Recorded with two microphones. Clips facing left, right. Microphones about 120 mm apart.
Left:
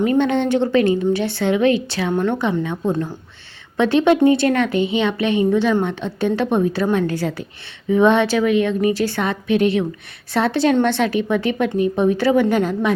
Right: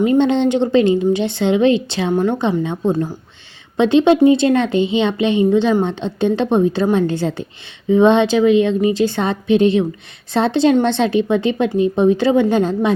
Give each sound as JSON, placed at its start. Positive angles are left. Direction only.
{"t": 0.0, "sound": "a woman's voice", "side_deg": -25}
{"t": 2.1, "sound": "a woman's voice", "side_deg": -10}
{"t": 2.4, "sound": "a woman's voice", "side_deg": -25}